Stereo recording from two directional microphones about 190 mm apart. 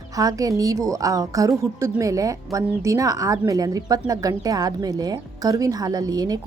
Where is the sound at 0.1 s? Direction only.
20° right (ahead or behind).